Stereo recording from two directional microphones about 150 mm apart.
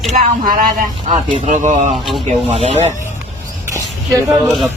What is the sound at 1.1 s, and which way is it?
Speech, 40° right (ahead or behind).